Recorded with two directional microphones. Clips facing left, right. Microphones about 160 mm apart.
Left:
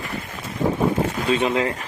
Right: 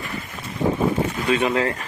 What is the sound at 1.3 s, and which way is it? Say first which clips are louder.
Speech: even; 25° left (ahead or behind).